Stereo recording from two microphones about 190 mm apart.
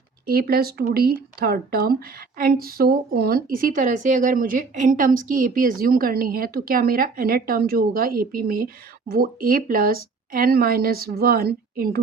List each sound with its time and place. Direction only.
0.3 s speech: 50° right (ahead or behind)